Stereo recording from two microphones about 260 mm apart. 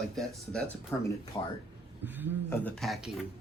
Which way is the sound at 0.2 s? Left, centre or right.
Centre.